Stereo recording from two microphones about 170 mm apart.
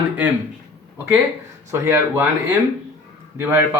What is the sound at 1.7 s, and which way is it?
Speech, 15° right (ahead or behind).